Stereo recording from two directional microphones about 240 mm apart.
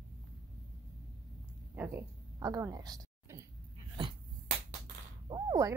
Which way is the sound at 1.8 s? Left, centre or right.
Centre.